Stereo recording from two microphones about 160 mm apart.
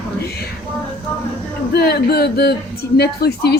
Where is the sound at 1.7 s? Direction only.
80° left.